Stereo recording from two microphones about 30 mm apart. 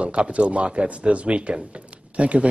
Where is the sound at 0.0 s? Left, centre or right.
Right.